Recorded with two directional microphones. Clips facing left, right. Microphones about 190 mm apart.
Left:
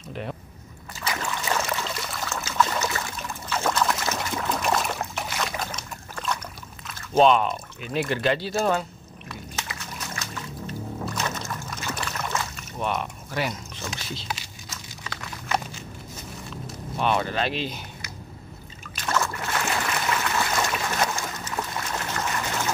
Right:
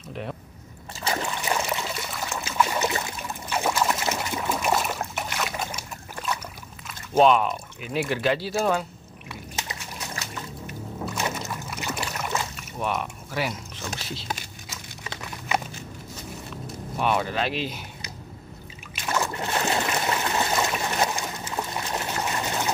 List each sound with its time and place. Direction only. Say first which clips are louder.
0.1 s speech: even; centre (ahead or behind)
0.9 s a sound: right 3 dB; 30° right (ahead or behind)
1.2 s trickle: even; 15° right (ahead or behind)
4.3 s boat: even; 10° right (ahead or behind)
7.0 s speech: even; 5° right (ahead or behind)
9.3 s a sound: even; 15° right (ahead or behind)
11.1 s music: right 3 dB; 10° right (ahead or behind)
11.6 s boat: right 1 dB; 15° right (ahead or behind)
12.2 s rowboat: even; 15° right (ahead or behind)
12.7 s a sound: even; 5° right (ahead or behind)
16.9 s speech: even; 5° right (ahead or behind)
18.9 s trickle: even; 15° right (ahead or behind)
21.9 s a sound: right 1 dB; 20° right (ahead or behind)